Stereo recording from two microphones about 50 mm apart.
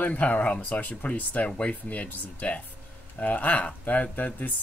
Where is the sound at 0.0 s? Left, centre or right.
Left.